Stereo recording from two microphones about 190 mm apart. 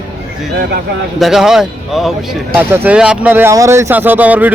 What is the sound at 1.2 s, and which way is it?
Speech, centre (ahead or behind).